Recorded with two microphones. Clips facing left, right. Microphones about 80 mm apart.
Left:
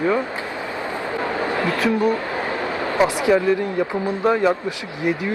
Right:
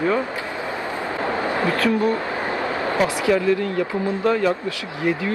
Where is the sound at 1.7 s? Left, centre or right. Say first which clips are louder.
Left 2 dB; centre.